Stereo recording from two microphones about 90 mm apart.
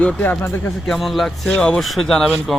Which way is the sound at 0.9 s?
Centre (ahead or behind).